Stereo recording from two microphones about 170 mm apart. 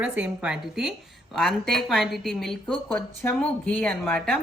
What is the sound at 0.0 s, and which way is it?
A woman's voice, 5° right (ahead or behind).